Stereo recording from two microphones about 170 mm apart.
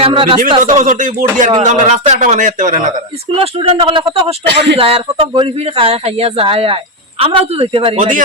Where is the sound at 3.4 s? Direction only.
30° right (ahead or behind).